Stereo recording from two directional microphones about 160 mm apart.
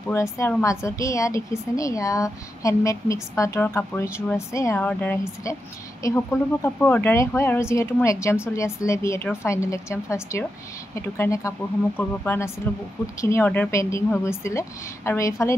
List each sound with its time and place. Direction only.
0.1 s a woman's voice: 15° left (ahead or behind)